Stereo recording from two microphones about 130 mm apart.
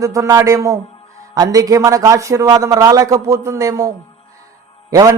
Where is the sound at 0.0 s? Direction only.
25° right (ahead or behind).